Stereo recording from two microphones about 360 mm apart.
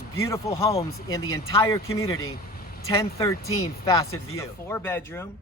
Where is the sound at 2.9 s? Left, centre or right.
Centre.